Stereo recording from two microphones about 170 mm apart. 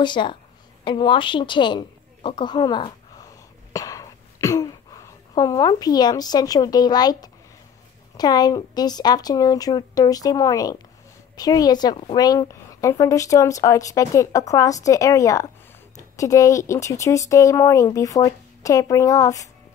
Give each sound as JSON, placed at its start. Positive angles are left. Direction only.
{"t": 0.0, "sound": "a woman's voice", "side_deg": 30}